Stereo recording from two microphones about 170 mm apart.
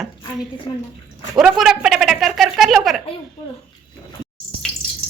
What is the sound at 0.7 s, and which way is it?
Speech, 25° left (ahead or behind).